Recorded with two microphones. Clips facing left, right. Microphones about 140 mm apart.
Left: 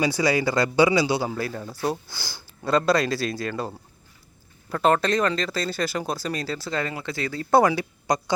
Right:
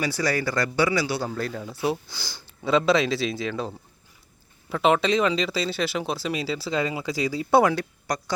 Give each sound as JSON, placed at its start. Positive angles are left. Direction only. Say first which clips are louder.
{"t": 0.0, "sound": "a man's voice", "louder": "left 3 dB", "side_deg": 15}
{"t": 1.3, "sound": "speech", "louder": "even", "side_deg": 5}